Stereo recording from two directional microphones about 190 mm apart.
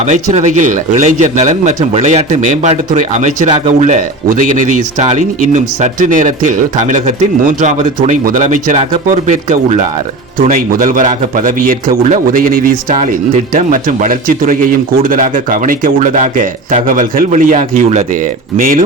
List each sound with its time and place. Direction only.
0.0 s a man's voice: 40° right (ahead or behind)